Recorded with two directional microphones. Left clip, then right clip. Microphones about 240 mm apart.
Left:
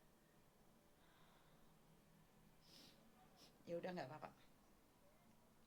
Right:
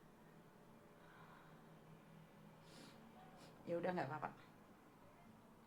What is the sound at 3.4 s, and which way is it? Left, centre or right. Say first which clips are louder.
Speech: right 6 dB; left.